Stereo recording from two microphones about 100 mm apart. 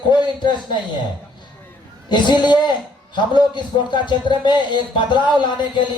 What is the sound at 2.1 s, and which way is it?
A man's voice, 50° left (ahead or behind).